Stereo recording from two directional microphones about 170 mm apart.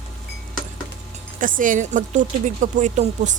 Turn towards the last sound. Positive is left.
turn(degrees=-45)  # may be behind; listen again after turning